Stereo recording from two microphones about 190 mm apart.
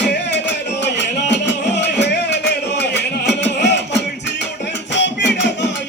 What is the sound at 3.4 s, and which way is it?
Music, 65° left (ahead or behind).